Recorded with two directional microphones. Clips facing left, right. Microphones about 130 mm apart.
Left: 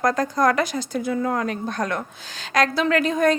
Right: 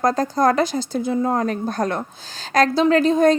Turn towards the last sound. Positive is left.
turn(degrees=-30)  # may be behind; listen again after turning